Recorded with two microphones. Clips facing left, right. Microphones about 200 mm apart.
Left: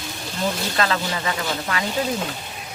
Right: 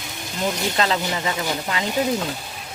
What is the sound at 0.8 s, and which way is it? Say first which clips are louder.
Speech: even; 20° right (ahead or behind).